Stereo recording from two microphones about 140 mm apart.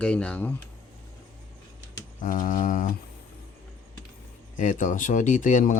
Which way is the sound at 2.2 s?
70° left (ahead or behind).